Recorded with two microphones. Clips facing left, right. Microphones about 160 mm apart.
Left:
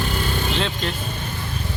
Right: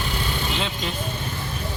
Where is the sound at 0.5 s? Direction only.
10° right (ahead or behind).